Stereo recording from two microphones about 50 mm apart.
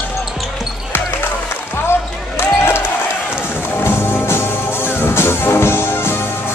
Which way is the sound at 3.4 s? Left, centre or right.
Left.